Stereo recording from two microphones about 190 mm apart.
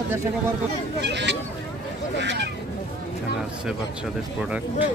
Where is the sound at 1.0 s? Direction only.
65° right (ahead or behind).